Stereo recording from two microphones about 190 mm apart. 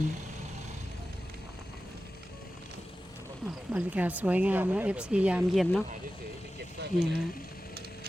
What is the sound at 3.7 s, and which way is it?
Speech, 10° right (ahead or behind).